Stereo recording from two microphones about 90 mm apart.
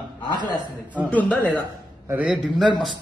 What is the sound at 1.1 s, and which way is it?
Speech, 15° left (ahead or behind).